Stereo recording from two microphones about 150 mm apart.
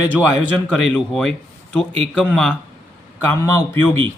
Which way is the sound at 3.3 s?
15° left (ahead or behind).